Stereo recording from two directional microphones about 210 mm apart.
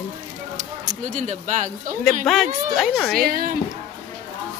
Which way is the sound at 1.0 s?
35° right (ahead or behind).